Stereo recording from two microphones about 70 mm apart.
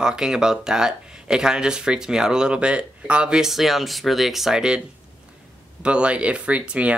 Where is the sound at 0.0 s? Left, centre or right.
Centre.